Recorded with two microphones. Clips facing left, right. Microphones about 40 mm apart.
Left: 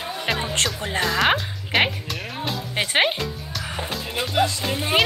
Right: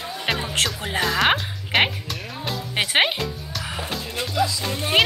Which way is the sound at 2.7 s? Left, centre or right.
Right.